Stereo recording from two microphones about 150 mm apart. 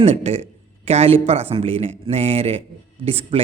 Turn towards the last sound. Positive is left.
turn(degrees=-40)  # may be behind; listen again after turning